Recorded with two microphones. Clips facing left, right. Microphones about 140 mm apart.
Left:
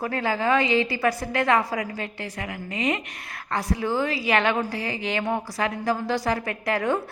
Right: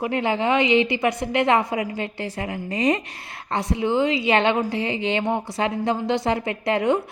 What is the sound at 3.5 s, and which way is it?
A woman's voice, 25° right (ahead or behind).